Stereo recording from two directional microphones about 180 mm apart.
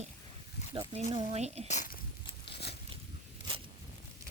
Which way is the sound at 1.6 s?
45° left (ahead or behind).